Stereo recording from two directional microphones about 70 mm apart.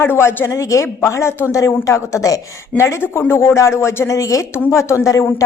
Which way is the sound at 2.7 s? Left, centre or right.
Left.